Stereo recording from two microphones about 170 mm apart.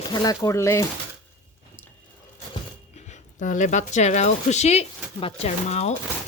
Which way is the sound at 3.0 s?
50° left (ahead or behind).